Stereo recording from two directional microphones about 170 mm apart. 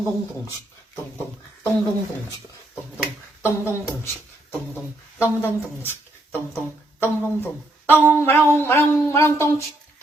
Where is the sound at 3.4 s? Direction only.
15° left (ahead or behind).